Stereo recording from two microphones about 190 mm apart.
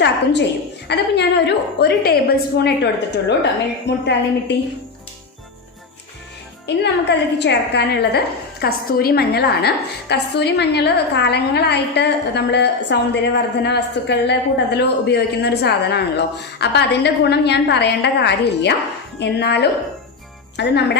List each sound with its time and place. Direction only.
0.9 s a woman's voice: 60° left (ahead or behind)
6.7 s a woman's voice: 65° left (ahead or behind)